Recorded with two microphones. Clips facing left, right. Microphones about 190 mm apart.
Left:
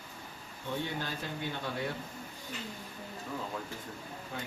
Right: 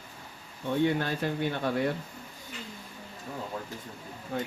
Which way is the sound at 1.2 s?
65° right (ahead or behind).